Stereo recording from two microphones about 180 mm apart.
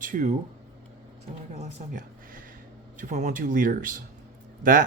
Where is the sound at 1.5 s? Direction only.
50° right (ahead or behind).